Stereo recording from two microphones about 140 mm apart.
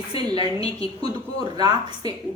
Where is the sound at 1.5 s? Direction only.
30° right (ahead or behind).